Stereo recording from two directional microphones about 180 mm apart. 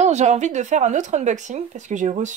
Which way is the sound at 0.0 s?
40° right (ahead or behind).